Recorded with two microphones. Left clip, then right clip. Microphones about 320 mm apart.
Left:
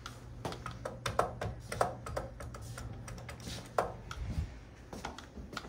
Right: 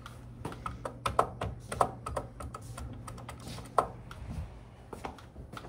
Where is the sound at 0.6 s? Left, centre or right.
Right.